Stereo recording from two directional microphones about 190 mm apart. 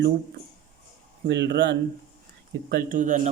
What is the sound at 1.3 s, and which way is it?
Speech, 65° right (ahead or behind).